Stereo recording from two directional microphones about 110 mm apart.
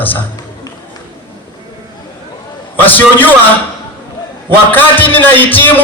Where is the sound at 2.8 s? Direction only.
15° left (ahead or behind).